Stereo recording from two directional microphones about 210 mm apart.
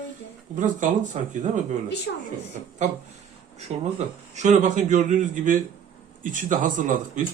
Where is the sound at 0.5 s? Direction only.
35° right (ahead or behind).